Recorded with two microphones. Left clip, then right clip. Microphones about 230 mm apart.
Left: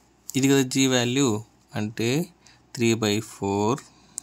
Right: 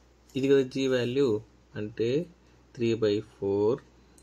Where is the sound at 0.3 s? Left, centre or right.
Left.